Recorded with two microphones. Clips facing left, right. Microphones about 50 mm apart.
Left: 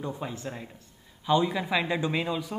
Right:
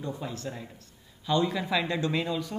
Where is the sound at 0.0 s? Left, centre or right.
Centre.